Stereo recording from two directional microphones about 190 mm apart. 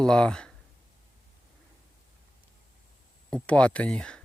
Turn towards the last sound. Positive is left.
turn(degrees=5)  # may be behind; listen again after turning